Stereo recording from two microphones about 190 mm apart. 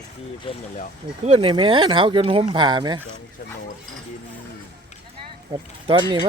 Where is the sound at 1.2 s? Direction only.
35° right (ahead or behind).